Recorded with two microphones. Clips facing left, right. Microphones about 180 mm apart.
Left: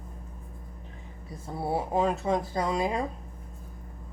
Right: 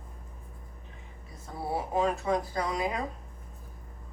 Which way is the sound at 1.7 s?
25° left (ahead or behind).